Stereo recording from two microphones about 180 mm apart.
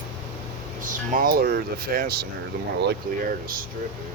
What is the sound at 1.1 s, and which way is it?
Speech, 55° right (ahead or behind).